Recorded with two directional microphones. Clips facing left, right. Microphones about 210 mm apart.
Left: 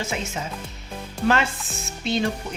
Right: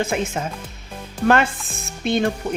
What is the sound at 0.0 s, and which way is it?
Speech, 55° right (ahead or behind).